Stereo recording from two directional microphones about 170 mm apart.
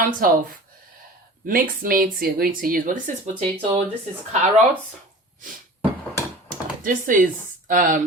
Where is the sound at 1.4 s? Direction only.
55° right (ahead or behind).